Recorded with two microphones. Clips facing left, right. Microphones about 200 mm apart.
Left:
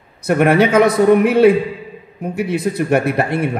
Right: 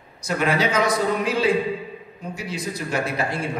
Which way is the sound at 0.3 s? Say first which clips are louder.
Left 9 dB; 60° left (ahead or behind).